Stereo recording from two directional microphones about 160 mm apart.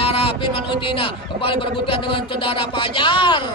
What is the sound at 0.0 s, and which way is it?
A man's voice, 35° left (ahead or behind).